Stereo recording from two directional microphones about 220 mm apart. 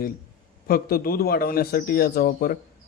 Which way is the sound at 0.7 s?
45° left (ahead or behind).